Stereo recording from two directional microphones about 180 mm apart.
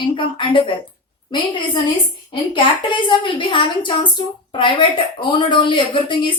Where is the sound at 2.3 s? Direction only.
25° left (ahead or behind).